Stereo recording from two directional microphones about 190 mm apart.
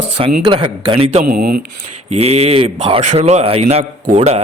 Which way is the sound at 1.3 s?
45° right (ahead or behind).